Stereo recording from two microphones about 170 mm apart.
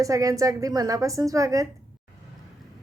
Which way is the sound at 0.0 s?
20° right (ahead or behind).